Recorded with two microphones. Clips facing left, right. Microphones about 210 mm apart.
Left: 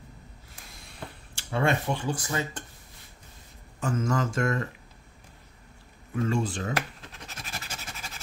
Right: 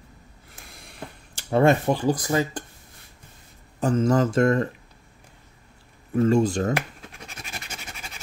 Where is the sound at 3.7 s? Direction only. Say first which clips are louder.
Right 7 dB; 35° right (ahead or behind).